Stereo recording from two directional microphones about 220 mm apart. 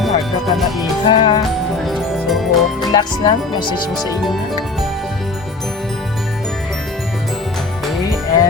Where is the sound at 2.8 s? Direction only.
20° left (ahead or behind).